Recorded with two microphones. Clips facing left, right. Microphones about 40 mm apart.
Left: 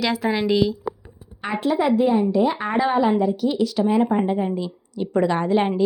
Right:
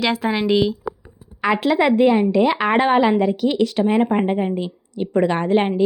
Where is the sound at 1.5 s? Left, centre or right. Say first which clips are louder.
Right 4 dB; right.